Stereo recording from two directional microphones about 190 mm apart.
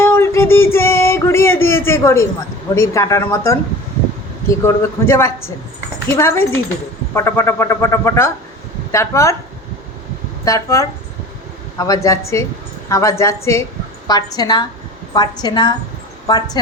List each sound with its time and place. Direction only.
0.0 s a sound: 10° left (ahead or behind)
2.7 s speech: 15° left (ahead or behind)
10.4 s speech: 15° left (ahead or behind)
12.0 s a woman's voice: 15° left (ahead or behind)